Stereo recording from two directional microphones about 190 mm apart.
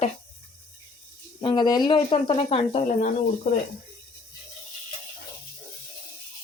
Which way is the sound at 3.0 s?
45° left (ahead or behind).